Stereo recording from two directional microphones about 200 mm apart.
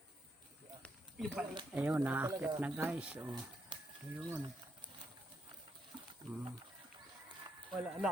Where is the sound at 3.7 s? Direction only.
25° right (ahead or behind).